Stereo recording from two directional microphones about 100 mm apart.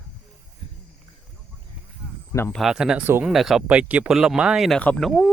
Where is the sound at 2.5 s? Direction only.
5° right (ahead or behind).